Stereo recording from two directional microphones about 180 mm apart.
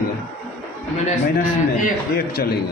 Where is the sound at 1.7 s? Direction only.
50° left (ahead or behind).